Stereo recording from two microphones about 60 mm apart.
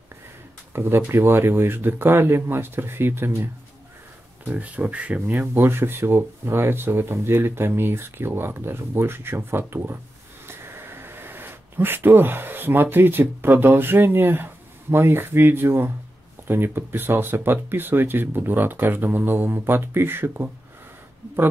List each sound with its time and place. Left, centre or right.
0.7 s speech: right
4.6 s speech: right
5.4 s speech: right